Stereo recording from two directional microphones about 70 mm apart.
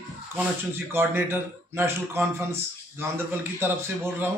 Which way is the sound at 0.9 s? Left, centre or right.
Right.